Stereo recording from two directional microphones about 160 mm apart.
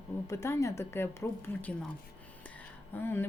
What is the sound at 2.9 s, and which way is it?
Speech, 15° left (ahead or behind).